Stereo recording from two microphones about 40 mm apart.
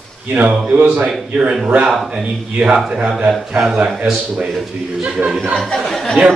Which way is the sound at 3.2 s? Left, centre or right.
Centre.